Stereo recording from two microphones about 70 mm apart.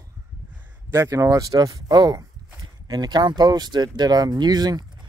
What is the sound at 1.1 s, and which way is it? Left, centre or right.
Speech, right.